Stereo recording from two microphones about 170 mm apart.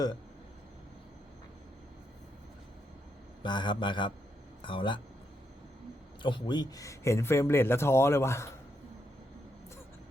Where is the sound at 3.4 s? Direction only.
25° left (ahead or behind).